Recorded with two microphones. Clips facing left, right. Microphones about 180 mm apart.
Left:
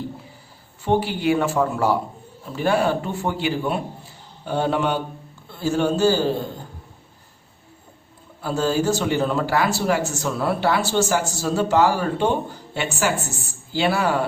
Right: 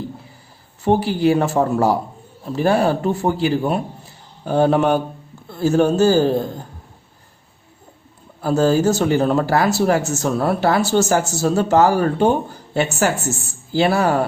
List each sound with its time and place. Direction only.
0.9 s a man's voice: 40° right (ahead or behind)
8.4 s speech: 45° right (ahead or behind)